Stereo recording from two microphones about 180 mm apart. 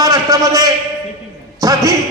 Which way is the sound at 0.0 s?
20° right (ahead or behind).